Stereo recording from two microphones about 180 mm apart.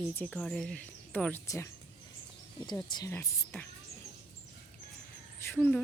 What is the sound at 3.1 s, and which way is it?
Speech, 10° left (ahead or behind).